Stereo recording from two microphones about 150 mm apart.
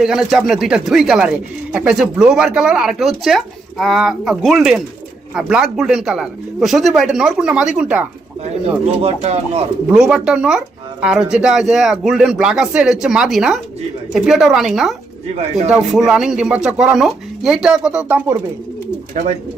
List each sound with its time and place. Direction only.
0.0 s speech: 5° right (ahead or behind)
9.0 s speech: 45° right (ahead or behind)
9.9 s speech: 5° right (ahead or behind)